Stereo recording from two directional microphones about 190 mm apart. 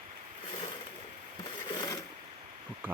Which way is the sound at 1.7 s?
20° left (ahead or behind).